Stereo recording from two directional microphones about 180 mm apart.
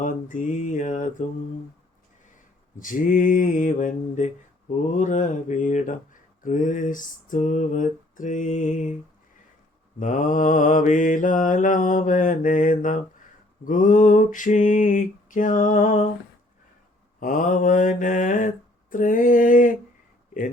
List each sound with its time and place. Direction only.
0.0 s mantra: 45° left (ahead or behind)
2.7 s mantra: 50° left (ahead or behind)
10.0 s mantra: 45° left (ahead or behind)
17.2 s mantra: 45° left (ahead or behind)